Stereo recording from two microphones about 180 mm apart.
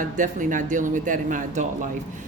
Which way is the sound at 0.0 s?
45° right (ahead or behind).